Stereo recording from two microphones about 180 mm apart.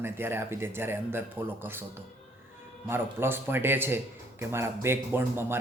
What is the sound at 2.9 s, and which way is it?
Speech, 10° right (ahead or behind).